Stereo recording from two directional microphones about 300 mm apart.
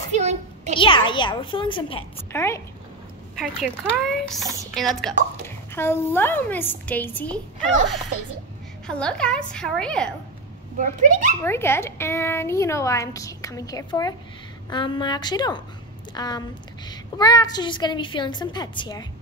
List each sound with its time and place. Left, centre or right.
0.1 s a sound: right
0.7 s a woman's voice: centre
8.8 s a woman's voice: centre
10.8 s a child's voice: right
11.4 s a woman's voice: centre